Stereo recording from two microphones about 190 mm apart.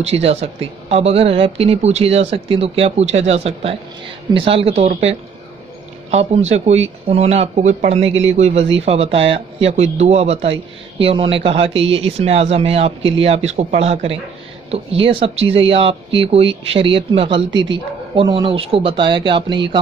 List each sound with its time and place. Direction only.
0.0 s speech: 35° right (ahead or behind)